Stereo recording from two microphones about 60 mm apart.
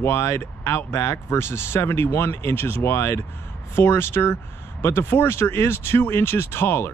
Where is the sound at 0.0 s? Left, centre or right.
Left.